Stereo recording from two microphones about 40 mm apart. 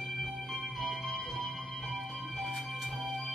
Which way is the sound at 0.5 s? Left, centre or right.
Centre.